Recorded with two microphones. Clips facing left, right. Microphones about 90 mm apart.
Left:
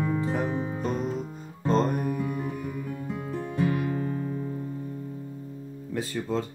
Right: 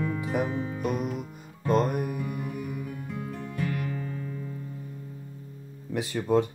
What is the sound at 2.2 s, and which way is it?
Music, 35° left (ahead or behind).